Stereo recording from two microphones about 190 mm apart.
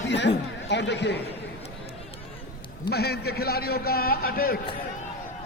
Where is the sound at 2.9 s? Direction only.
55° left (ahead or behind).